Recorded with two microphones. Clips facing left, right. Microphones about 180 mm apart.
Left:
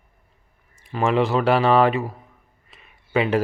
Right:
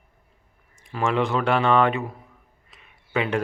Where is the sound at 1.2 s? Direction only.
5° left (ahead or behind).